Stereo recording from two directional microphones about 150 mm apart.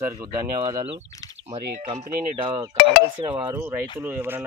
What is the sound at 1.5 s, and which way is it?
Speech, 45° right (ahead or behind).